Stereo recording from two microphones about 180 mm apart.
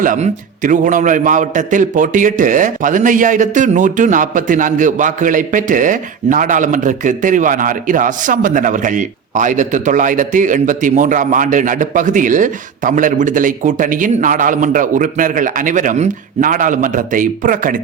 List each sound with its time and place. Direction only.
0.0 s a man's voice: 45° right (ahead or behind)